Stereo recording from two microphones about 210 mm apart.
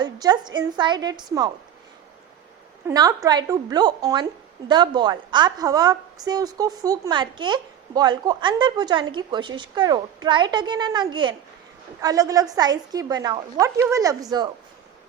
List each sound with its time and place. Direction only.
0.0 s a woman's voice: 20° right (ahead or behind)
2.8 s a woman's voice: 15° right (ahead or behind)